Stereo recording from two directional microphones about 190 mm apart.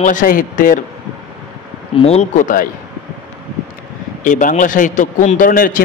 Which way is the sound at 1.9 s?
30° left (ahead or behind).